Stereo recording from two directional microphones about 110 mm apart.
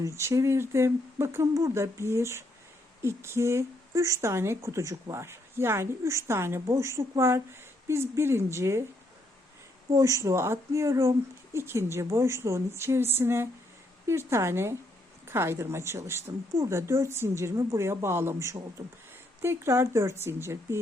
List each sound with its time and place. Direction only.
0.0 s speech: 25° right (ahead or behind)
9.9 s speech: 25° right (ahead or behind)